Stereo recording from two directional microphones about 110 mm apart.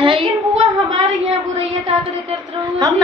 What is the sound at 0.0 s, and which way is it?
Child singing, 45° right (ahead or behind).